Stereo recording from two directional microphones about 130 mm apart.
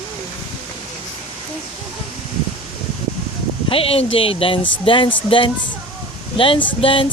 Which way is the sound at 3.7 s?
45° left (ahead or behind).